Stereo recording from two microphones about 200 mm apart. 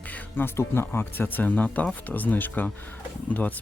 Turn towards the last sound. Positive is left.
turn(degrees=10)  # may be behind; listen again after turning